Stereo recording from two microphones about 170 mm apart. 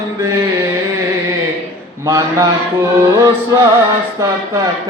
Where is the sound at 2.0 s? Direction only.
20° right (ahead or behind).